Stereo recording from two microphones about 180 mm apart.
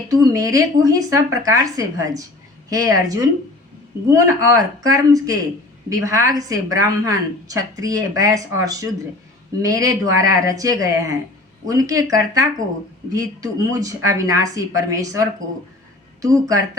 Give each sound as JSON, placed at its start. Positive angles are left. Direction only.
{"t": 0.1, "sound": "a woman's voice", "side_deg": -20}